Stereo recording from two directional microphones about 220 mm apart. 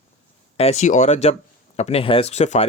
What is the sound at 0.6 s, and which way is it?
Speech, 30° left (ahead or behind).